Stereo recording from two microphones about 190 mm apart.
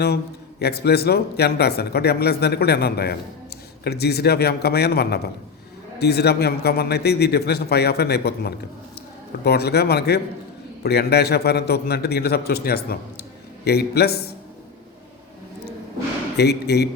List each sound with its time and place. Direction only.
0.6 s a man's voice: 55° left (ahead or behind)
16.4 s a man's voice: 60° left (ahead or behind)